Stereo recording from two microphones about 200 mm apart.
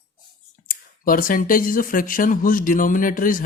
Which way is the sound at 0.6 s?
45° left (ahead or behind).